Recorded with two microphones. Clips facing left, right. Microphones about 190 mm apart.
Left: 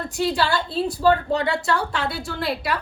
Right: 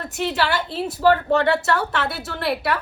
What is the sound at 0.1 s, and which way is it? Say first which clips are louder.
A woman's voice: even; 20° right (ahead or behind).